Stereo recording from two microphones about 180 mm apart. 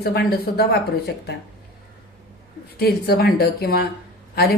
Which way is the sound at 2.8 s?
60° left (ahead or behind).